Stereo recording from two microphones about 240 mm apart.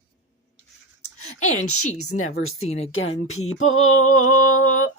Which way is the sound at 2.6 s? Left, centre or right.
Left.